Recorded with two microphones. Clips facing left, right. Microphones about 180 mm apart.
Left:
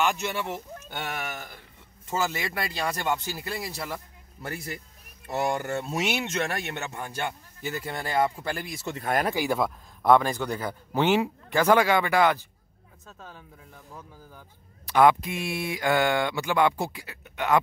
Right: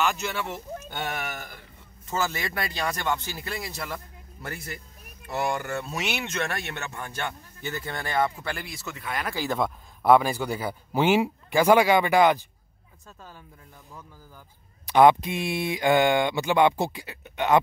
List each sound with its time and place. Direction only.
0.1 s speech: 10° left (ahead or behind)
5.3 s speech: 25° left (ahead or behind)
6.4 s speech: 15° left (ahead or behind)
8.4 s speech: 40° left (ahead or behind)
9.3 s speech: 15° left (ahead or behind)
9.6 s speech: 5° right (ahead or behind)
13.0 s speech: 5° right (ahead or behind)
14.9 s speech: 20° right (ahead or behind)